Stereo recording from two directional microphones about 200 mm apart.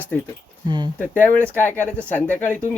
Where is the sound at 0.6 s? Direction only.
20° right (ahead or behind).